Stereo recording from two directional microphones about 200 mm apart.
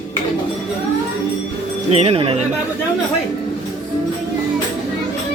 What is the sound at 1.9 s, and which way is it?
Speech, 30° right (ahead or behind).